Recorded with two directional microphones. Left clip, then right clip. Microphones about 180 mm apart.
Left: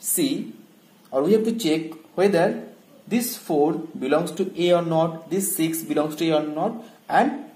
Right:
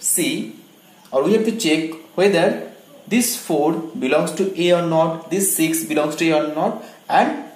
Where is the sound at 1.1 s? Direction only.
40° left (ahead or behind).